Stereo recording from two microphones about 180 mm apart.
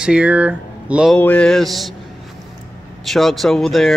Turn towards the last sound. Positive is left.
turn(degrees=0)  # may be behind; listen again after turning